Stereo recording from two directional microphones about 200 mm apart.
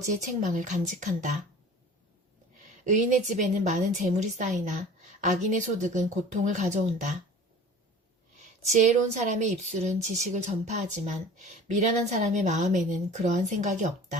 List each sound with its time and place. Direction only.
0.2 s speech: 40° right (ahead or behind)
2.8 s speech: 40° right (ahead or behind)
8.4 s speech: 35° right (ahead or behind)